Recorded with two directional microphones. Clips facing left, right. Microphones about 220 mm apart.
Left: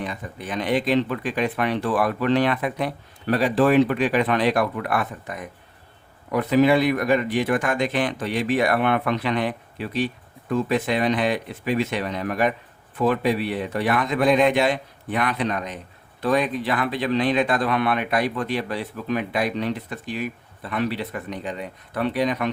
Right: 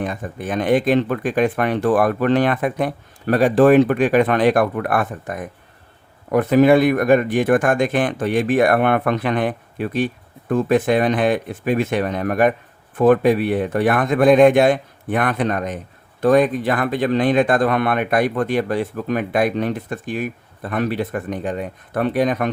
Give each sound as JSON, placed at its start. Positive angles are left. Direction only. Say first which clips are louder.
{"t": 0.0, "sound": "speech", "louder": "right 6 dB", "side_deg": -50}